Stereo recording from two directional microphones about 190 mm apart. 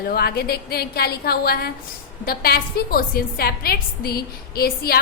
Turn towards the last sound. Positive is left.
turn(degrees=50)  # may be behind; listen again after turning